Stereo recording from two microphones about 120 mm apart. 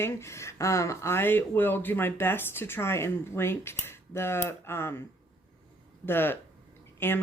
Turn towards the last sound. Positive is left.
turn(degrees=20)  # may be behind; listen again after turning